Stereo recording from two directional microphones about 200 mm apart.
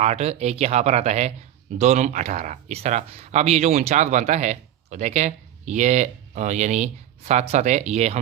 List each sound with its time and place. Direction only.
0.0 s speech: 35° right (ahead or behind)